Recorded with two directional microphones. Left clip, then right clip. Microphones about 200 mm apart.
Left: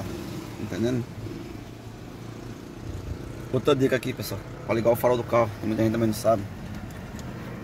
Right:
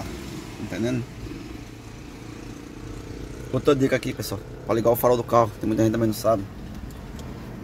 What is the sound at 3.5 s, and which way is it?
Speech, 10° right (ahead or behind).